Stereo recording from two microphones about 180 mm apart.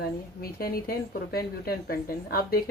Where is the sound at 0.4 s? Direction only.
55° left (ahead or behind).